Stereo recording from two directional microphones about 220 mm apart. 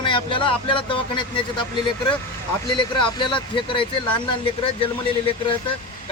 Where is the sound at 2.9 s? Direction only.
20° left (ahead or behind).